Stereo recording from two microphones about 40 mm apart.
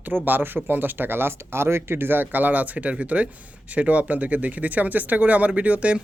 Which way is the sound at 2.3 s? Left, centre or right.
Right.